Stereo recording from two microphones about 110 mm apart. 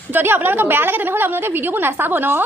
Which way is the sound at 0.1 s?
20° right (ahead or behind).